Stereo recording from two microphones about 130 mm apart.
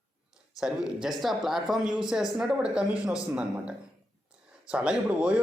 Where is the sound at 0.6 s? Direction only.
5° right (ahead or behind).